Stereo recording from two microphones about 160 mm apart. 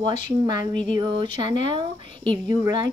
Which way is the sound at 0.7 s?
55° left (ahead or behind).